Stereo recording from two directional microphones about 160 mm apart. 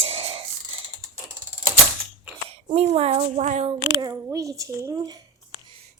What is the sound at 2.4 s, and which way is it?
Speech, 40° right (ahead or behind).